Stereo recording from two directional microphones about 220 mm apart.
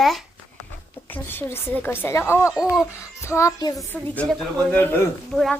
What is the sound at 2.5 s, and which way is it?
Speech, centre (ahead or behind).